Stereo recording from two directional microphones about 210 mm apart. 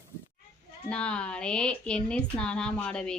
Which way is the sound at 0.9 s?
5° left (ahead or behind).